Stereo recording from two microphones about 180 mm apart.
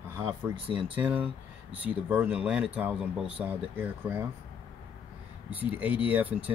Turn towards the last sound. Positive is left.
turn(degrees=-10)  # may be behind; listen again after turning